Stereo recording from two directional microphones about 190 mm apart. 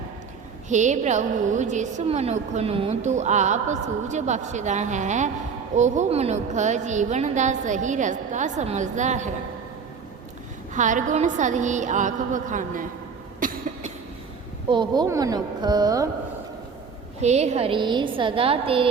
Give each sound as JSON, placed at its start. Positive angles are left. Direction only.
{"t": 0.7, "sound": "a woman's voice", "side_deg": -40}
{"t": 10.8, "sound": "a woman's voice", "side_deg": -40}
{"t": 13.4, "sound": "cough", "side_deg": -45}
{"t": 14.7, "sound": "a woman's voice", "side_deg": -25}
{"t": 17.2, "sound": "a woman's voice", "side_deg": -35}